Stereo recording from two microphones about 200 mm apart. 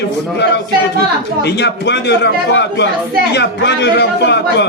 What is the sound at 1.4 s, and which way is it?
Speech, 60° left (ahead or behind).